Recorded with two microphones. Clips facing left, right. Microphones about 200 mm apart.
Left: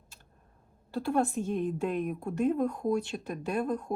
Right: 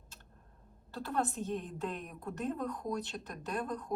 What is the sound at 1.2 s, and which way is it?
Speech, 10° left (ahead or behind).